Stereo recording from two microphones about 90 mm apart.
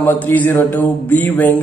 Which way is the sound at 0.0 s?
20° left (ahead or behind).